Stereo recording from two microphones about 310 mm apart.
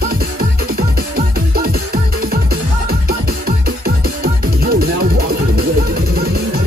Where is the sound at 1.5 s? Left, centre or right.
Right.